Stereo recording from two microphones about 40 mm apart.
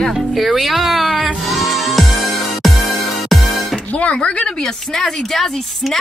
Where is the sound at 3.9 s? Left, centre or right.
Left.